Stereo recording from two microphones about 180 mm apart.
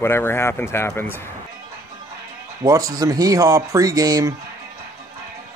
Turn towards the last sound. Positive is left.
turn(degrees=-20)  # may be behind; listen again after turning